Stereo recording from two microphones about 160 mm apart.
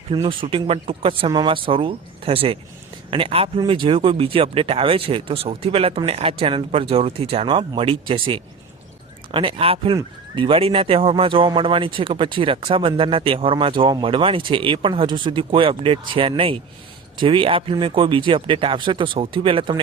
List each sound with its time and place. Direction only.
0.1 s speech: 30° right (ahead or behind)